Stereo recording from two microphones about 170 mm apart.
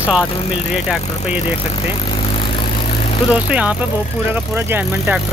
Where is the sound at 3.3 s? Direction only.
10° right (ahead or behind).